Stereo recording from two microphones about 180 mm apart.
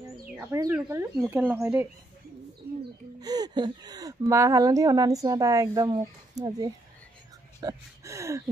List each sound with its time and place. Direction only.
0.4 s speech: 15° right (ahead or behind)
2.6 s a sound: 10° right (ahead or behind)
3.2 s speech: 20° right (ahead or behind)